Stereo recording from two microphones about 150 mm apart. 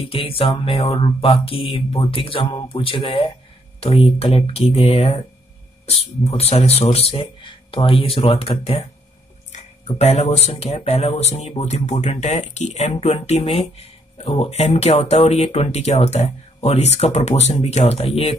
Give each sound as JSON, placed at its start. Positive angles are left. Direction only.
{"t": 0.0, "sound": "speech", "side_deg": 40}